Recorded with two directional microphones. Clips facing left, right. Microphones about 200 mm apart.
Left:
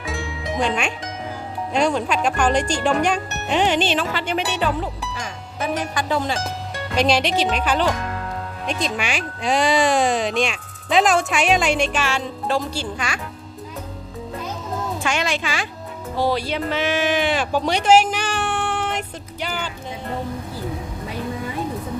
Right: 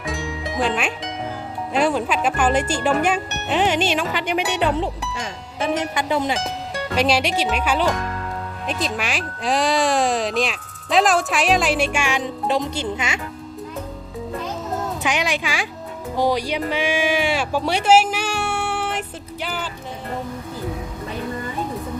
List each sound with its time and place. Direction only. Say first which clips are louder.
0.0 s music: right 1 dB; centre (ahead or behind)
0.6 s speech: right 1 dB; 5° right (ahead or behind)
4.8 s speech: right 3 dB; 25° right (ahead or behind)
6.9 s speech: left 1 dB; 5° right (ahead or behind)
15.0 s speech: even; 15° right (ahead or behind)